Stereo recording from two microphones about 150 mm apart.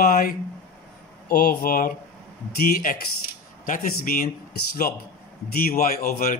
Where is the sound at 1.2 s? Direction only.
85° left; by 4.3 s 70° left (ahead or behind).